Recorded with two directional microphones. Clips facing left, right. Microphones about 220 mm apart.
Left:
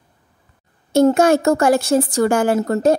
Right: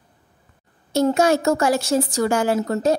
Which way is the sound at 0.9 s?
50° left (ahead or behind).